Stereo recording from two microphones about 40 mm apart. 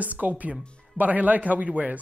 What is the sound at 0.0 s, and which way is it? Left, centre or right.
Speech, right.